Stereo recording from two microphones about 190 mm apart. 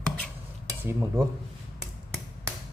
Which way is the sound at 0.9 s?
15° right (ahead or behind).